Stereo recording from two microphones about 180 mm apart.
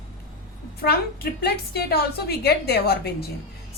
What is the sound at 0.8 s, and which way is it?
A woman's voice, 55° left (ahead or behind).